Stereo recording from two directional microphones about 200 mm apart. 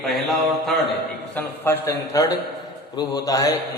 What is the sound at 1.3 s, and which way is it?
A man's voice, 15° left (ahead or behind).